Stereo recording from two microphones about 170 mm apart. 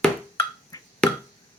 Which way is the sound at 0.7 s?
20° left (ahead or behind).